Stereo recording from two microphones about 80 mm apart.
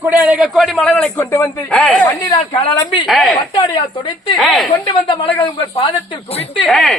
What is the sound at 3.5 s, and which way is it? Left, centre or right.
Speech, left.